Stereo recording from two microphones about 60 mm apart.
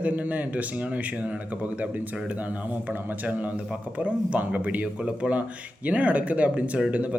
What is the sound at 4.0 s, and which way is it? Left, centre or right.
Speech, right.